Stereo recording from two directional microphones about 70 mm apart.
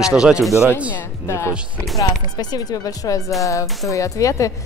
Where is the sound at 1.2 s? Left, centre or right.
Left.